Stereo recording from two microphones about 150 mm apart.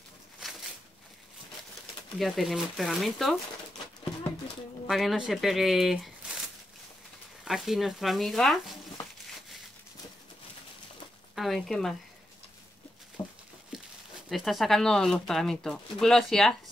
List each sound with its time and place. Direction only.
2.1 s speech: centre (ahead or behind)
4.8 s speech: centre (ahead or behind)
7.4 s speech: centre (ahead or behind)
11.3 s speech: centre (ahead or behind)
13.2 s a sound: 30° left (ahead or behind)
14.3 s speech: centre (ahead or behind)